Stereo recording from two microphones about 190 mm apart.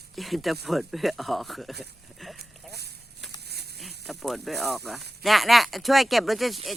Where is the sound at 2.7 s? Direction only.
60° right (ahead or behind).